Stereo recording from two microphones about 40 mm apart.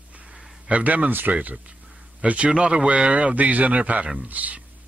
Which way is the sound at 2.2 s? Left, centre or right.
Right.